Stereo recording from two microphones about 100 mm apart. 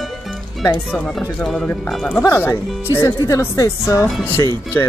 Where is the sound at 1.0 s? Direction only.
5° left (ahead or behind).